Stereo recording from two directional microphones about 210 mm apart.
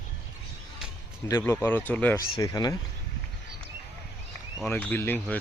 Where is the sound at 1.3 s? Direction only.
10° left (ahead or behind).